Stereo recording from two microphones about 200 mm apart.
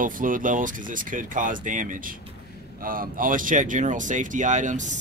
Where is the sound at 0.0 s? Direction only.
40° right (ahead or behind).